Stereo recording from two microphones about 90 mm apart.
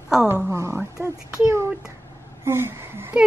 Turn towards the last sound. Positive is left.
turn(degrees=-25)  # may be behind; listen again after turning